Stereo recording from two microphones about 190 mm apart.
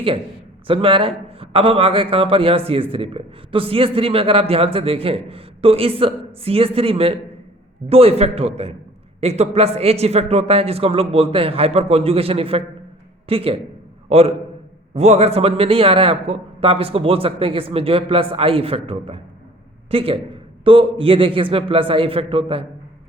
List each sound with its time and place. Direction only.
0.7 s a man's voice: 30° right (ahead or behind)